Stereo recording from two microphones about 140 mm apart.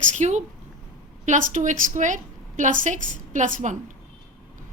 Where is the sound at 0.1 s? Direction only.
55° right (ahead or behind).